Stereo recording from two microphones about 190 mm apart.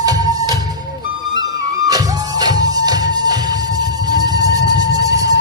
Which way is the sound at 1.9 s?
20° right (ahead or behind).